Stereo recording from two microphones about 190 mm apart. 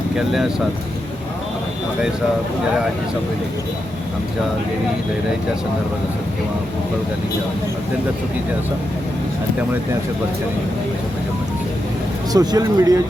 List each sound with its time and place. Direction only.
12.3 s speech: 20° right (ahead or behind)